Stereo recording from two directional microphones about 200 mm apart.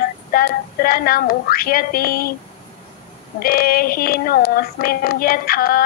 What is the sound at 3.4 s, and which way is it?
Speech, 50° left (ahead or behind).